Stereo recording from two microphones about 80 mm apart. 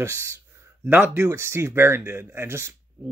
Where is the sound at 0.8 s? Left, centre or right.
Right.